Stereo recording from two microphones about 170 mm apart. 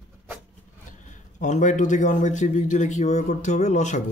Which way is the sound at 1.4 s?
45° left (ahead or behind).